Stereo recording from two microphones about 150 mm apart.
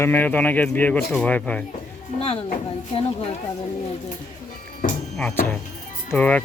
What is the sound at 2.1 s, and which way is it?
Speech, 40° left (ahead or behind).